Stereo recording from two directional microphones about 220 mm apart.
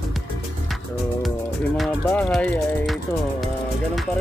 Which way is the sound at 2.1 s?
5° left (ahead or behind).